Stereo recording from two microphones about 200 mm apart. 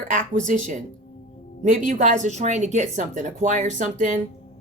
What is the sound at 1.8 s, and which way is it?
Speech, 35° right (ahead or behind).